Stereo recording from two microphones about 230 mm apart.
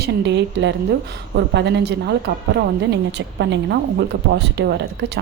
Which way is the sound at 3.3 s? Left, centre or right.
Right.